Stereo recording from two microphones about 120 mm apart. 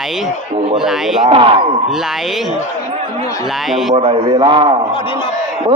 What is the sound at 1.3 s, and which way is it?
Speech, 45° right (ahead or behind).